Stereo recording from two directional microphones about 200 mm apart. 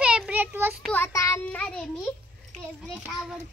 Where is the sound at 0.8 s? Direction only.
10° left (ahead or behind).